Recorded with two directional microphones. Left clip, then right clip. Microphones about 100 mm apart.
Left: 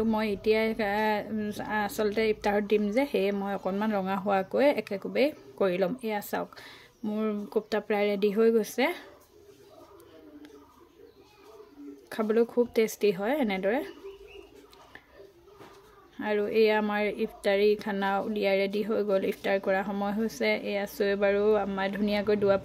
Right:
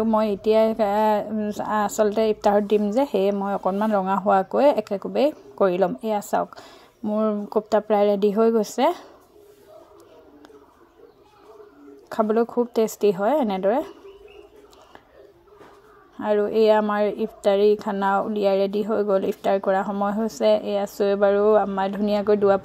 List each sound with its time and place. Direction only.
0.0 s speech: 35° right (ahead or behind)
3.4 s speech: 30° right (ahead or behind)
7.4 s speech: 45° right (ahead or behind)
12.1 s speech: 30° right (ahead or behind)
16.2 s speech: 30° right (ahead or behind)